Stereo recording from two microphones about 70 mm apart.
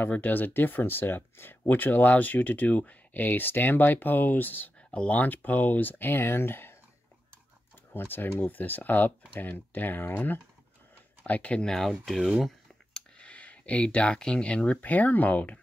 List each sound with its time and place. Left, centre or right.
0.0 s speech: left
7.9 s speech: left; by 12.4 s centre
13.2 s speech: centre